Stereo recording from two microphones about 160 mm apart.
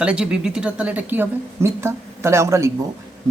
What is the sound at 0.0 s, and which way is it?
Speech, 5° right (ahead or behind).